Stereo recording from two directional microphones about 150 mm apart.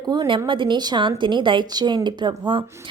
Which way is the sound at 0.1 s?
30° right (ahead or behind).